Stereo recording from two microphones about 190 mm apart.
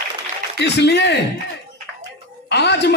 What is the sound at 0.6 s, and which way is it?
Speech, 65° left (ahead or behind).